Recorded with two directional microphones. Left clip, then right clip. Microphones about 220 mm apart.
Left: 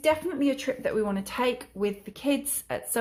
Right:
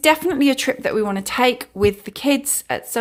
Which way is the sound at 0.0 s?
35° right (ahead or behind).